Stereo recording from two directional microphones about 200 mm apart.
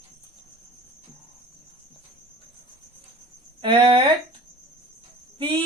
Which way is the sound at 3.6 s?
25° right (ahead or behind).